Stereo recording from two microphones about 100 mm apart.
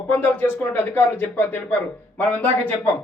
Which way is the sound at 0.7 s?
20° left (ahead or behind).